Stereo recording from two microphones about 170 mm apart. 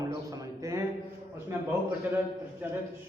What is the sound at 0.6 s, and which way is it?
Speech, 20° right (ahead or behind).